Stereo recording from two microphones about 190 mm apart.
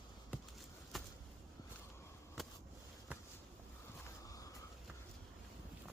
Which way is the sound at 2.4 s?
Centre (ahead or behind).